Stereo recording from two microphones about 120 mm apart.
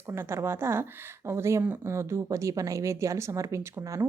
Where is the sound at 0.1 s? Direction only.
20° right (ahead or behind).